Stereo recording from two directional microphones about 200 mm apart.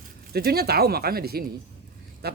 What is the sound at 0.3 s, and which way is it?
Speech, 50° right (ahead or behind).